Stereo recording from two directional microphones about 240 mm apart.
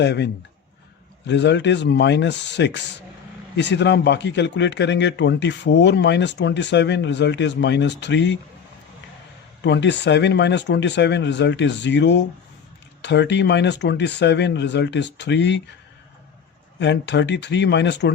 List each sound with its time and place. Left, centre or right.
0.0 s a man's voice: left
1.3 s a man's voice: left
9.6 s a man's voice: left
16.8 s a man's voice: left